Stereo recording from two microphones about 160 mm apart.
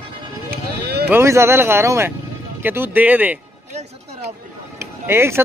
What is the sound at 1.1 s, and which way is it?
Speech, 15° right (ahead or behind).